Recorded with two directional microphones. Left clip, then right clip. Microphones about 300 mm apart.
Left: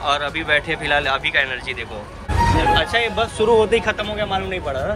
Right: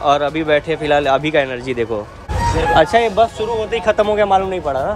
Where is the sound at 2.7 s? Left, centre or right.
Centre.